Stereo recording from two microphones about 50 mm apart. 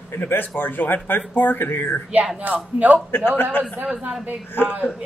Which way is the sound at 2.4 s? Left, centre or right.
Right.